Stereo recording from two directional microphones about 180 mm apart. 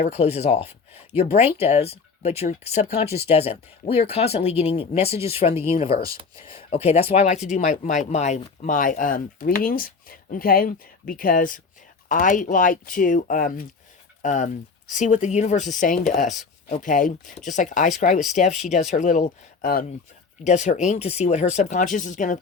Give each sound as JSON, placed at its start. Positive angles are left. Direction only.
{"t": 0.0, "sound": "speech", "side_deg": 35}
{"t": 6.0, "sound": "speech", "side_deg": -20}
{"t": 6.3, "sound": "speech", "side_deg": 30}